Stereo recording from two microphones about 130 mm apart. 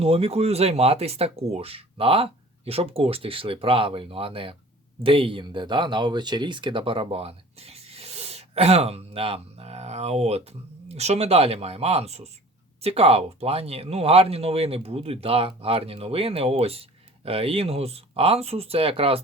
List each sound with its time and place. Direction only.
0.0 s speech: 50° right (ahead or behind)